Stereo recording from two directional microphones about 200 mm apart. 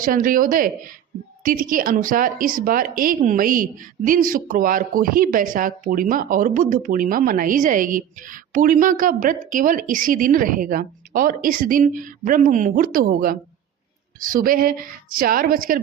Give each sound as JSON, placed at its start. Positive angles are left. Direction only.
{"t": 0.0, "sound": "a woman's voice", "side_deg": -45}